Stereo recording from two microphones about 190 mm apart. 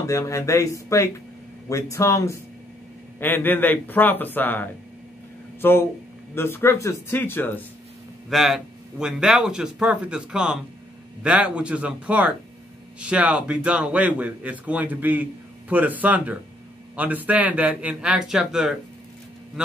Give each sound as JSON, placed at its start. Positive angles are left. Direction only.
{"t": 0.0, "sound": "a man's voice", "side_deg": 15}
{"t": 8.3, "sound": "speech", "side_deg": 0}